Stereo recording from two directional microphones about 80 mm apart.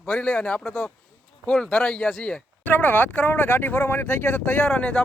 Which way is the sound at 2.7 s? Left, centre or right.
Left.